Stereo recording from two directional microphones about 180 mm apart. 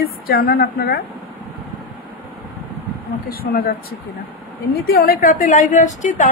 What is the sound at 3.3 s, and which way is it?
A woman's voice, 55° left (ahead or behind).